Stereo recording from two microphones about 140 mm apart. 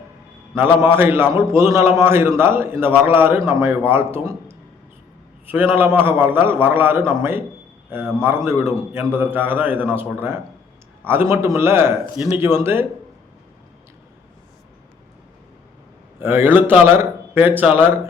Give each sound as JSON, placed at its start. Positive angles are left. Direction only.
{"t": 0.8, "sound": "a man's voice", "side_deg": -15}
{"t": 16.2, "sound": "a man's voice", "side_deg": -15}